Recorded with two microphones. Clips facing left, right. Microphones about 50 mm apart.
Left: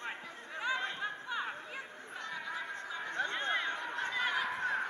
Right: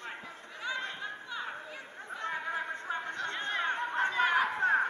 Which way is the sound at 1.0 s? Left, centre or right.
Centre.